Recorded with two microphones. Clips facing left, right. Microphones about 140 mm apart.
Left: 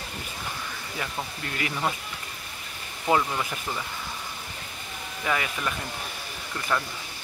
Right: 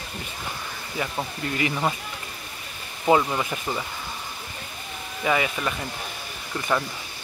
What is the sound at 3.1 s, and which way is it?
Speech, 15° right (ahead or behind).